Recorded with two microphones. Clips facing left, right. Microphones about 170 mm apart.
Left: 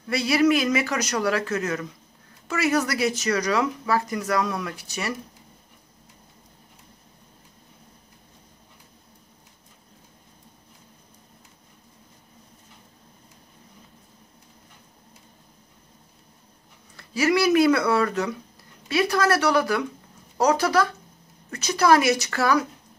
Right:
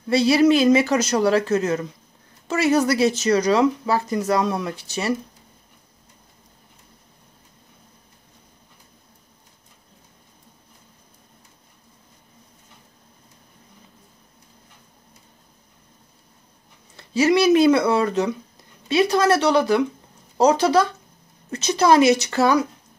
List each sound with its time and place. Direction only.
0.1 s speech: 30° right (ahead or behind)
16.9 s speech: 25° right (ahead or behind)